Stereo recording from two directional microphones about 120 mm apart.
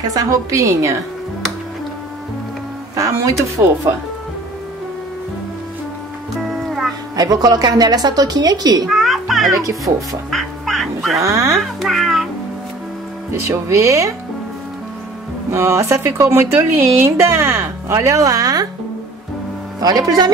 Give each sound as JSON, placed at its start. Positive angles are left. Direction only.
{"t": 0.1, "sound": "speech", "side_deg": -25}
{"t": 3.0, "sound": "speech", "side_deg": -25}
{"t": 6.5, "sound": "music", "side_deg": 0}
{"t": 7.2, "sound": "a woman's voice", "side_deg": -35}
{"t": 8.8, "sound": "children playing", "side_deg": 0}
{"t": 9.5, "sound": "speech", "side_deg": -30}
{"t": 10.3, "sound": "music", "side_deg": 0}
{"t": 11.2, "sound": "speech", "side_deg": -25}
{"t": 11.6, "sound": "speech", "side_deg": 0}
{"t": 13.5, "sound": "speech", "side_deg": -25}
{"t": 15.5, "sound": "speech", "side_deg": -20}
{"t": 19.8, "sound": "a woman's voice", "side_deg": -30}